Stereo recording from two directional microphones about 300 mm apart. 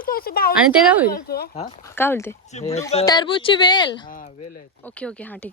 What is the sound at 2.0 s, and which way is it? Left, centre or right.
Speech, centre.